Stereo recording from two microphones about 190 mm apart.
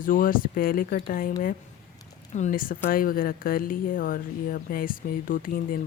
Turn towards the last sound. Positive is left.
turn(degrees=45)  # may be behind; listen again after turning